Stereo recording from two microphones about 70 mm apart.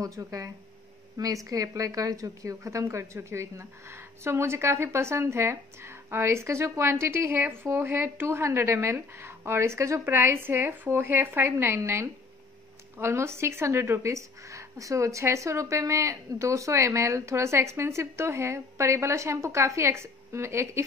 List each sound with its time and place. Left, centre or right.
0.0 s speech: right